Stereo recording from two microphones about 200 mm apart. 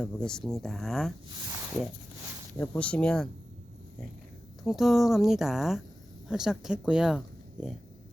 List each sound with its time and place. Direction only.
0.0 s speech: 5° left (ahead or behind)
2.6 s speech: 5° left (ahead or behind)
4.6 s speech: centre (ahead or behind)